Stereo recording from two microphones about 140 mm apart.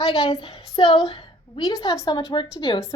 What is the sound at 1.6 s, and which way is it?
Speech, 25° left (ahead or behind).